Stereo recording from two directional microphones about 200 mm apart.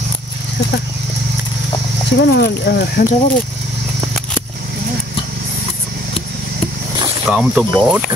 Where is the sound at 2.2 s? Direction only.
55° left (ahead or behind).